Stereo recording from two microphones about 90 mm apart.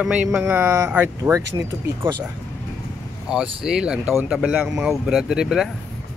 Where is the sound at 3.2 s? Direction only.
5° right (ahead or behind).